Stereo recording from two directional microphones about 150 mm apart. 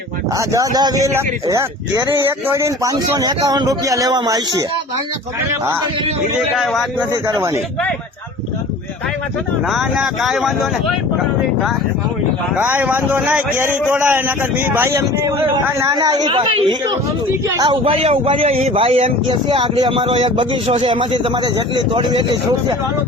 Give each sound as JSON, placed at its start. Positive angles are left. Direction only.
{"t": 0.3, "sound": "speech", "side_deg": -20}
{"t": 7.1, "sound": "speech", "side_deg": -25}
{"t": 9.6, "sound": "speech", "side_deg": -5}
{"t": 12.5, "sound": "a man's voice", "side_deg": -10}